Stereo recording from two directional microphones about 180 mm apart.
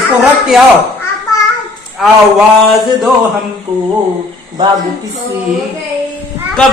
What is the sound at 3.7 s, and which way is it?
Music, 25° right (ahead or behind).